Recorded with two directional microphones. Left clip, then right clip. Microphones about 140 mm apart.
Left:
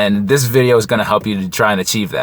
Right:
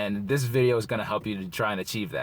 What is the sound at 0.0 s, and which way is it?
Speech, 25° left (ahead or behind).